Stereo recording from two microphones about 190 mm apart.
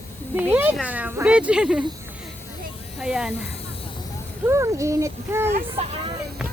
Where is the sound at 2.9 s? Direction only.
5° right (ahead or behind).